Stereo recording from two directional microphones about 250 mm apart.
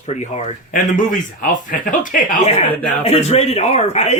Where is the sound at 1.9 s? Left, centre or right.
Left.